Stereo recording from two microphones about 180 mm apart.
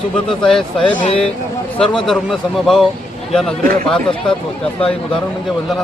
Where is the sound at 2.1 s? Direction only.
Centre (ahead or behind).